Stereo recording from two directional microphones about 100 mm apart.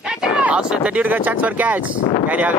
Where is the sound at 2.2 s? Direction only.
15° right (ahead or behind).